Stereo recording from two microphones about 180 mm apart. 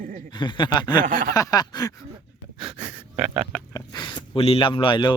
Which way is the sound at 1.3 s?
20° left (ahead or behind).